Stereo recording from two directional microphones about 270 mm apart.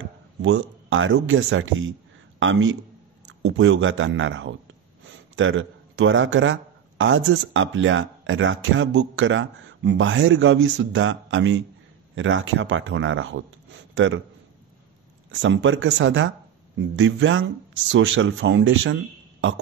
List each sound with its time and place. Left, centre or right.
0.4 s a man's voice: right
15.4 s speech: right